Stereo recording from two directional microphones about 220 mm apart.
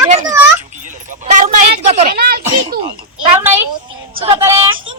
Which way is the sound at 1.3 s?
35° right (ahead or behind).